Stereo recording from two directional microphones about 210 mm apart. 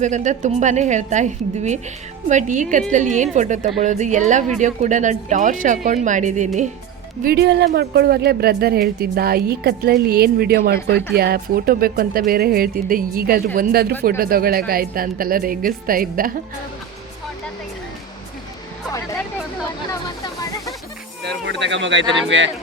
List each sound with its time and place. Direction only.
0.0 s speech: 35° right (ahead or behind)
7.2 s a woman's voice: 50° right (ahead or behind)
19.9 s snake: 15° left (ahead or behind)
21.2 s speech: 55° right (ahead or behind)